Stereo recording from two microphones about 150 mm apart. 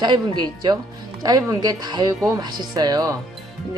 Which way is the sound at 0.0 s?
30° right (ahead or behind).